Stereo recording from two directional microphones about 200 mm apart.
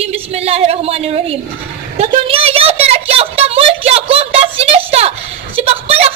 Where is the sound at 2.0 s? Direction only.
30° right (ahead or behind).